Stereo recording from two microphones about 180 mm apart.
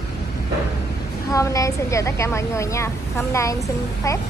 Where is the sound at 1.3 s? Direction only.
20° left (ahead or behind).